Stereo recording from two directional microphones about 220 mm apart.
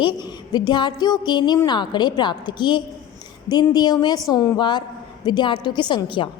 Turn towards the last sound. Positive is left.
turn(degrees=20)  # may be behind; listen again after turning